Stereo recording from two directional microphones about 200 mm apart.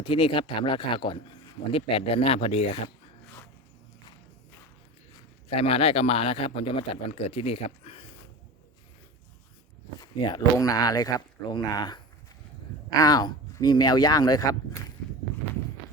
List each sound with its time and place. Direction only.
0.0 s a man's voice: 25° left (ahead or behind)
5.5 s a man's voice: 30° left (ahead or behind)
10.0 s a man's voice: 20° left (ahead or behind)
13.0 s a man's voice: 20° left (ahead or behind)